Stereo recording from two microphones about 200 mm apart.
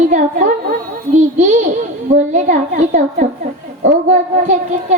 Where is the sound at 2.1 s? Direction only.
35° right (ahead or behind).